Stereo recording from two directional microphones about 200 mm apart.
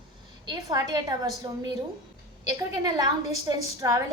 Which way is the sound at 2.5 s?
20° right (ahead or behind).